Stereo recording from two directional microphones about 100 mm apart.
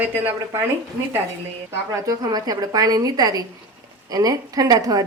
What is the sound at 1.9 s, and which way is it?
A woman's voice, 30° right (ahead or behind).